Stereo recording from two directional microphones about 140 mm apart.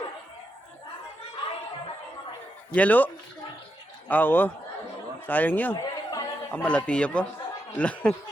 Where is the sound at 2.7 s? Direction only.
10° left (ahead or behind).